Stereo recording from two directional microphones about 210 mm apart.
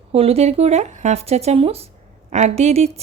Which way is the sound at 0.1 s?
30° right (ahead or behind).